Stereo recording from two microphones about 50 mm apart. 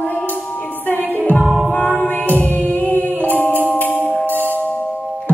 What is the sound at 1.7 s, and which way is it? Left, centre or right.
Music, left.